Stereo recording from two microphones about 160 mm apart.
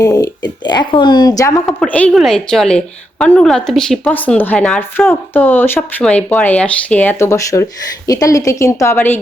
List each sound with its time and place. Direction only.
0.0 s speech: 20° left (ahead or behind)
1.6 s speech: 5° left (ahead or behind)